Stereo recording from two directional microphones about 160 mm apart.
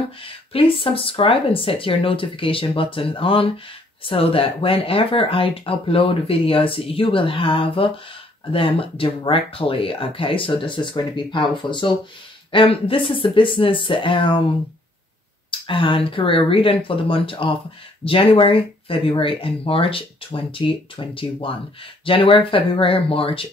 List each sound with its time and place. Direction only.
0.2 s speech: 35° left (ahead or behind)
15.6 s speech: 30° left (ahead or behind)